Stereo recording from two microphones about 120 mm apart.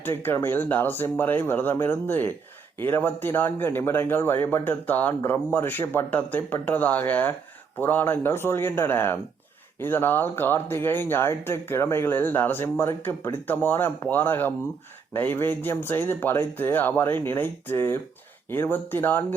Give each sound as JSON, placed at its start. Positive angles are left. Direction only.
{"t": 0.0, "sound": "speech", "side_deg": 20}